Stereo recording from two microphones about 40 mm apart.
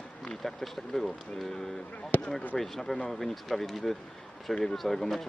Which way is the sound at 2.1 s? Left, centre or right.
Left.